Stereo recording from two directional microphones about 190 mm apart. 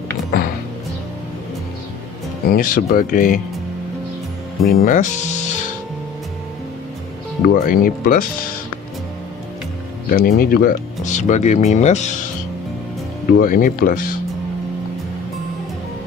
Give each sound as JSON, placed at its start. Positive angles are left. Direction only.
{"t": 2.5, "sound": "speech", "side_deg": 50}
{"t": 4.6, "sound": "speech", "side_deg": 45}
{"t": 7.4, "sound": "speech", "side_deg": 50}
{"t": 10.0, "sound": "speech", "side_deg": 50}
{"t": 13.3, "sound": "speech", "side_deg": 50}